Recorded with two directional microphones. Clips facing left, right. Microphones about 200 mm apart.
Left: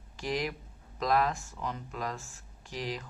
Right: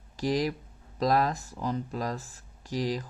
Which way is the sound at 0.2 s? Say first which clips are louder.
Right 6 dB; 35° right (ahead or behind).